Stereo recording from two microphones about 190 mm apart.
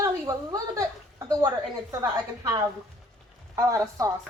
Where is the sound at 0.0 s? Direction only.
20° right (ahead or behind).